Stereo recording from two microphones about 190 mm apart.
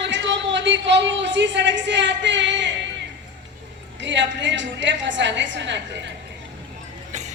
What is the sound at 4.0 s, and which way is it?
A man's voice, 70° right (ahead or behind).